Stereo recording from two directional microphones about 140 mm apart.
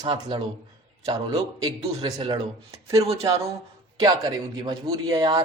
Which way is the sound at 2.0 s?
40° right (ahead or behind).